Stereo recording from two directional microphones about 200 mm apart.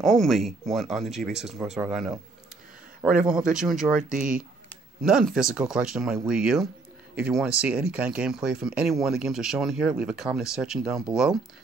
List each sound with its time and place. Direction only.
0.0 s speech: centre (ahead or behind)
4.2 s speech: 40° right (ahead or behind)
5.0 s speech: 5° right (ahead or behind)